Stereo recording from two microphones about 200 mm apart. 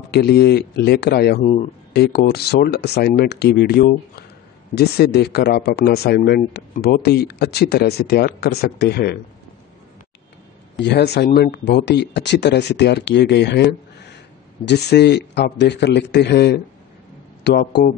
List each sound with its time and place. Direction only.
0.1 s speech: 55° left (ahead or behind)
1.4 s speech: 30° left (ahead or behind)
2.0 s speech: 55° left (ahead or behind)
10.8 s speech: 55° left (ahead or behind)